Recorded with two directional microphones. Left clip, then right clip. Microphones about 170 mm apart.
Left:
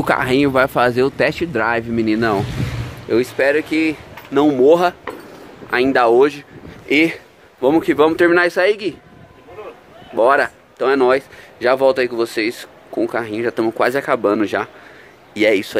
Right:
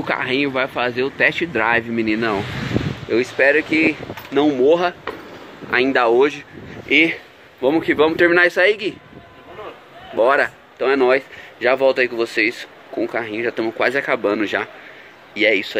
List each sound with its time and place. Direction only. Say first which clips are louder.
0.0 s speech: left 4 dB; 30° left (ahead or behind)
1.2 s speech: even; 10° left (ahead or behind)
6.9 s speech: even; 30° left (ahead or behind)
10.1 s speech: left 2 dB; 20° left (ahead or behind)
15.3 s speech: left 1 dB; 35° left (ahead or behind)